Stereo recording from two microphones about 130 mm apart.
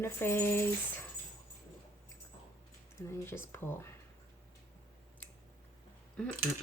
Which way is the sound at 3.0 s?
20° left (ahead or behind).